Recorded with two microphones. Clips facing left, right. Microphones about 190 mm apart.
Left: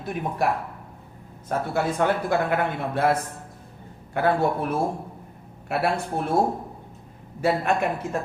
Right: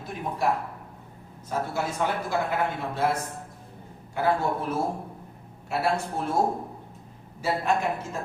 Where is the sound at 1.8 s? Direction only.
60° left (ahead or behind).